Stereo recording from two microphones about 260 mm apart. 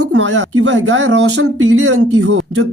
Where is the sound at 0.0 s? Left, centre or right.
Right.